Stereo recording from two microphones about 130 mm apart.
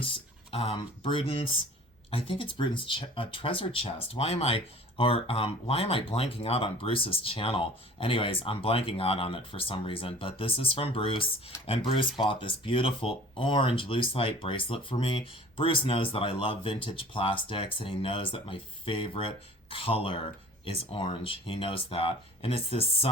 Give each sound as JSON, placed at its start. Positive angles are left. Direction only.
{"t": 0.0, "sound": "speech", "side_deg": 45}